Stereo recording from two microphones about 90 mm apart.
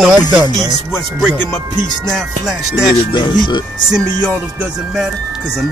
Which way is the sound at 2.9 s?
55° left (ahead or behind).